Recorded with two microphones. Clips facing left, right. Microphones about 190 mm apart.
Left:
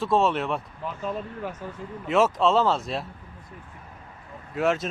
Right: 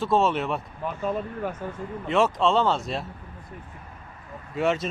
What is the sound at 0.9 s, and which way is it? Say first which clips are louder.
Speech: right 3 dB; 50° right (ahead or behind).